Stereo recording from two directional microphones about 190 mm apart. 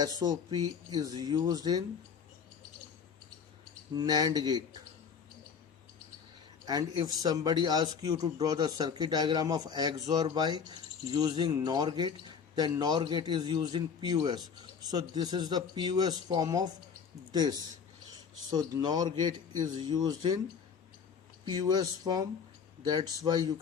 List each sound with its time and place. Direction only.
0.2 s a man's voice: 20° right (ahead or behind)
3.9 s a man's voice: 20° right (ahead or behind)
6.7 s a man's voice: 20° right (ahead or behind)
21.4 s a man's voice: 20° right (ahead or behind)